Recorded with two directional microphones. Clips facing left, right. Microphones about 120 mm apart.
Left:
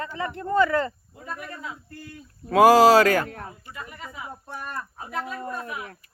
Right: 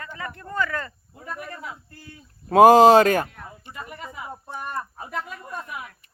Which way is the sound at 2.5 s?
25° right (ahead or behind).